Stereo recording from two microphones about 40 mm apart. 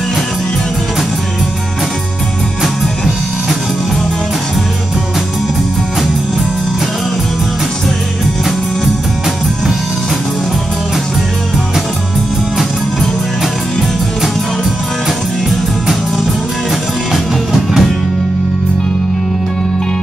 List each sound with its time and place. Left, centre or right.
17.1 s music: centre